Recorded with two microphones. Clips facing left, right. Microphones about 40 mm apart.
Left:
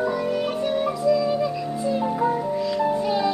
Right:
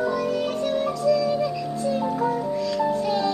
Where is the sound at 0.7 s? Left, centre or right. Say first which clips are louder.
Left 1 dB; centre.